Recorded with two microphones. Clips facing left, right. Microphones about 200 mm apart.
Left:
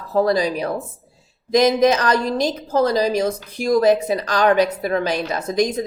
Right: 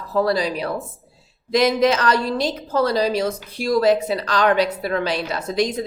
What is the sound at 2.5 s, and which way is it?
A woman's voice, 15° left (ahead or behind).